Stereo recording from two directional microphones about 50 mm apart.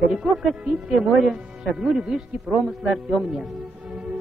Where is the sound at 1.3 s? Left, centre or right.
Centre.